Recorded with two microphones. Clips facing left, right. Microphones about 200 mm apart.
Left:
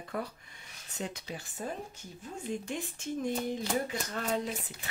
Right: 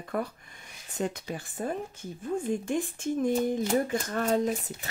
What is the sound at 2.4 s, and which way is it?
Speech, 50° right (ahead or behind).